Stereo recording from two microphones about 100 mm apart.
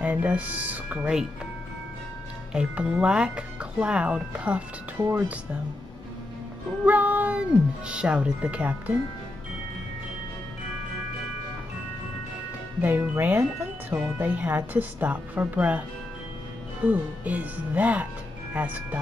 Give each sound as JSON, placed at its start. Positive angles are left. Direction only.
{"t": 0.0, "sound": "speech", "side_deg": -15}
{"t": 2.5, "sound": "speech", "side_deg": -10}
{"t": 6.9, "sound": "speech", "side_deg": -15}
{"t": 12.8, "sound": "speech", "side_deg": -20}
{"t": 16.8, "sound": "speech", "side_deg": -15}